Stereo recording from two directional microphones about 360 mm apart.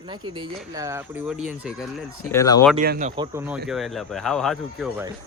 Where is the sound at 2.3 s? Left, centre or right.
Centre.